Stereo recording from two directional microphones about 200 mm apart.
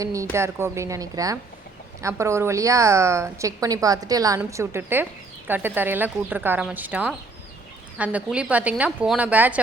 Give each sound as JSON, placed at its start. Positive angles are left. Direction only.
{"t": 0.0, "sound": "a woman's voice", "side_deg": -15}